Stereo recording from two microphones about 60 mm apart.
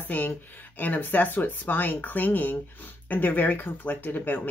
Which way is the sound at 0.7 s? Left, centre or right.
Left.